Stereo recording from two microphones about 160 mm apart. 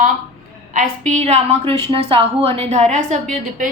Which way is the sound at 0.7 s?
50° right (ahead or behind).